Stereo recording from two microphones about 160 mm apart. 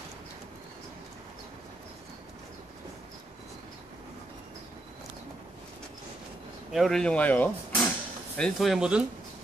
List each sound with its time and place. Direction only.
6.7 s speech: centre (ahead or behind)